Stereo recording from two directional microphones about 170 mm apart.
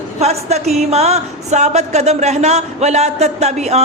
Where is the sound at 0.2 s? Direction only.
40° right (ahead or behind).